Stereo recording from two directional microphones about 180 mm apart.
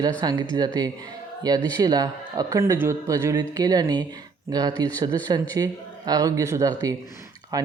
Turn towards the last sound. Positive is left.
turn(degrees=-20)  # may be behind; listen again after turning